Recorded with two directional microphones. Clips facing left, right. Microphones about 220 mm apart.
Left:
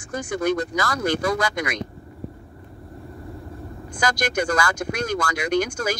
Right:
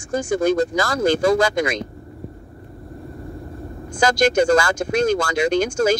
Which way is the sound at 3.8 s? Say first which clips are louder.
Right 7 dB; 25° right (ahead or behind).